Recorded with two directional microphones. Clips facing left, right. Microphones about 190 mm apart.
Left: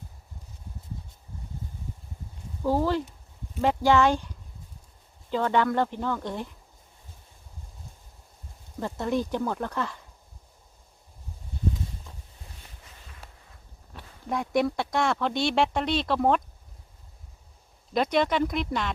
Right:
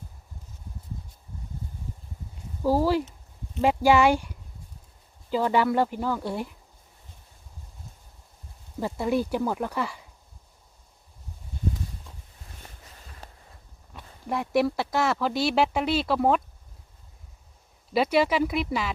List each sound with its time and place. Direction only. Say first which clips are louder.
2.6 s speech: right 2 dB; 10° right (ahead or behind)
8.8 s speech: right 2 dB; 5° right (ahead or behind)
13.1 s a sound: right 3 dB; 40° right (ahead or behind)
14.3 s speech: right 1 dB; 5° right (ahead or behind)
17.9 s speech: right 2 dB; 5° right (ahead or behind)